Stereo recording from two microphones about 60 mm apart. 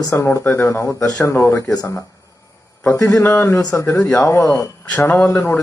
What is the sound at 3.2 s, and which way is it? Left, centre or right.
A man's voice, left.